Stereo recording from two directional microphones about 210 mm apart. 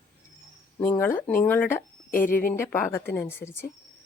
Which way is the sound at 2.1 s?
40° left (ahead or behind).